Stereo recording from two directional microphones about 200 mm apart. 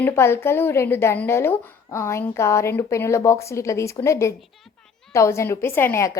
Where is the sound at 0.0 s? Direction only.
10° left (ahead or behind).